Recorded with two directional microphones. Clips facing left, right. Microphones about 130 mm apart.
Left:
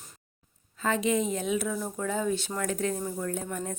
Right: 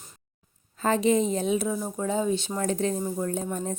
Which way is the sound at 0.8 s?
35° right (ahead or behind).